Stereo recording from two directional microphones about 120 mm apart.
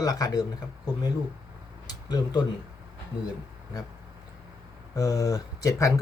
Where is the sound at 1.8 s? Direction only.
35° left (ahead or behind).